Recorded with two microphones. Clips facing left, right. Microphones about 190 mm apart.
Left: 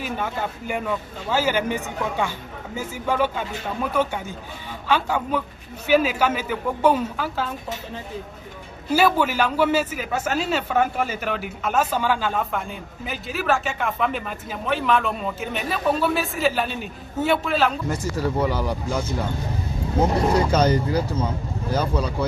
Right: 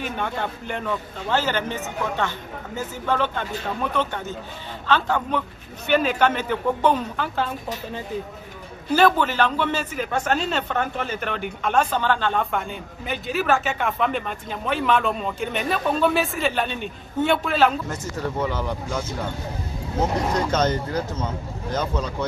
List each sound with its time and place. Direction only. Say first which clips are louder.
0.0 s a man's voice: even; 5° left (ahead or behind)
8.9 s a man's voice: right 1 dB; 10° left (ahead or behind)
17.8 s a man's voice: left 4 dB; 10° left (ahead or behind)